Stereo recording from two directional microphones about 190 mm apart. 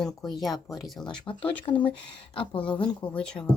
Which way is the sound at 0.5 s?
15° left (ahead or behind).